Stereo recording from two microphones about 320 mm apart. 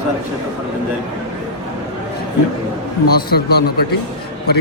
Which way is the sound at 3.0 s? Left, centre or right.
Left.